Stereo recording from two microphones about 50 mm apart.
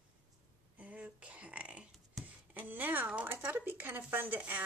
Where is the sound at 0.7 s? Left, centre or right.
Right.